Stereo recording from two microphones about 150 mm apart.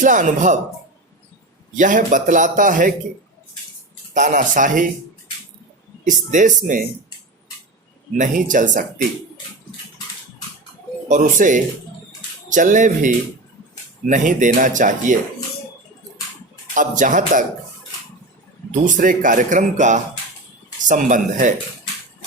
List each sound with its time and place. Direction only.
0.0 s speech: 55° right (ahead or behind)
1.7 s speech: 60° right (ahead or behind)
4.1 s speech: 55° right (ahead or behind)
6.1 s speech: 60° right (ahead or behind)
8.1 s speech: 60° right (ahead or behind)
11.1 s speech: 60° right (ahead or behind)
16.7 s speech: 60° right (ahead or behind)
18.7 s speech: 60° right (ahead or behind)